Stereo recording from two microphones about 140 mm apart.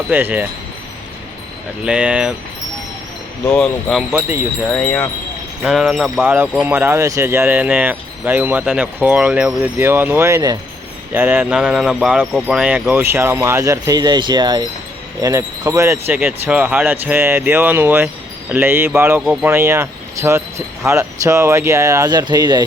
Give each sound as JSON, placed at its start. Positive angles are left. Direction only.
{"t": 0.1, "sound": "speech", "side_deg": -15}
{"t": 1.8, "sound": "speech", "side_deg": -10}
{"t": 3.4, "sound": "wind chime", "side_deg": 5}
{"t": 6.7, "sound": "speech", "side_deg": -15}
{"t": 16.1, "sound": "speech", "side_deg": -10}
{"t": 19.2, "sound": "wind chime", "side_deg": -5}
{"t": 19.5, "sound": "chime", "side_deg": -20}
{"t": 20.8, "sound": "speech", "side_deg": -20}